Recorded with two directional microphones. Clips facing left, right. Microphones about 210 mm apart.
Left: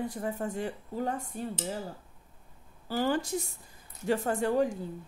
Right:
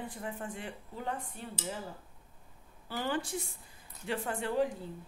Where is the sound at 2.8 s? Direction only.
40° left (ahead or behind).